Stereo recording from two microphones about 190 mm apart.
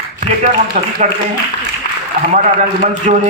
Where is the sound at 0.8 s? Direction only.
40° right (ahead or behind).